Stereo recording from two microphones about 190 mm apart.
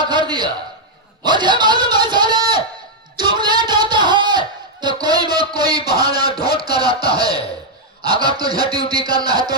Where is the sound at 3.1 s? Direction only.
25° right (ahead or behind).